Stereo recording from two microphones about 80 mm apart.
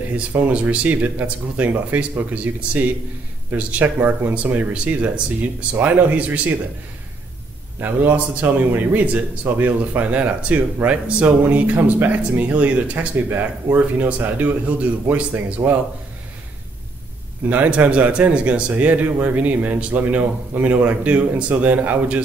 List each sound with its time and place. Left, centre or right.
0.3 s speech: centre
7.8 s speech: right
17.5 s speech: centre